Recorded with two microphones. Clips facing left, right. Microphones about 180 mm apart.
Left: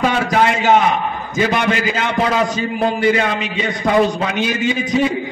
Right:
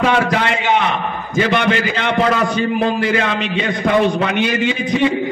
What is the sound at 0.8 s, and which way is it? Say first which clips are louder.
A man's voice: left 2 dB; 65° right (ahead or behind).